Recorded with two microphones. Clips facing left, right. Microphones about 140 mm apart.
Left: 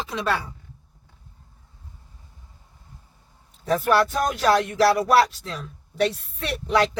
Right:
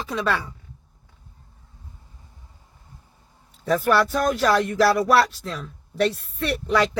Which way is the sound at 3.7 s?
Centre (ahead or behind).